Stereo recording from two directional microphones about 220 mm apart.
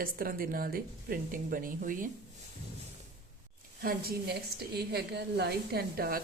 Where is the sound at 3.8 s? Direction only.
45° right (ahead or behind).